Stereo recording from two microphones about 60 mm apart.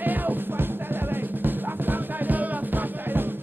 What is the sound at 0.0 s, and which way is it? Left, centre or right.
Music, right.